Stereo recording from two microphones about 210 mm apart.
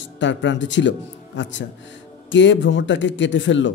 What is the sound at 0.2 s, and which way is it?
Speech, 60° left (ahead or behind).